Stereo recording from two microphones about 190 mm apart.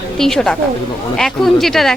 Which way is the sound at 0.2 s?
Centre (ahead or behind).